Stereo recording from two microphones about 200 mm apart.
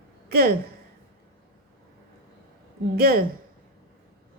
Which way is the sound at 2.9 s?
50° right (ahead or behind).